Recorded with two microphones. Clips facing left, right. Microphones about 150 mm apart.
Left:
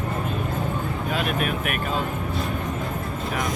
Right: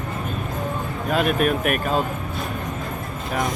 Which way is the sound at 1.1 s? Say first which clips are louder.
Right 7 dB; 45° right (ahead or behind).